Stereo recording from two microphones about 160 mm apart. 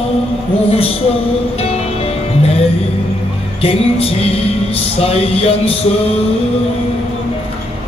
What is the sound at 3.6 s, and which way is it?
Music, 40° left (ahead or behind).